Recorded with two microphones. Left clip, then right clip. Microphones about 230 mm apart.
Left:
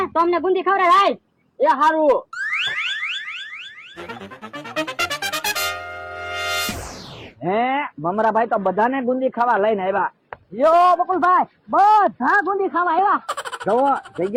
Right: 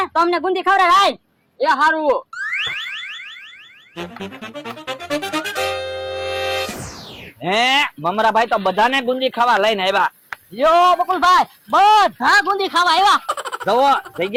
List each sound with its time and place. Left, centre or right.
0.0 s a man's voice: right
2.3 s car alarm: centre
3.9 s music: centre
7.4 s a man's voice: right
13.2 s fowl: centre
13.7 s a man's voice: right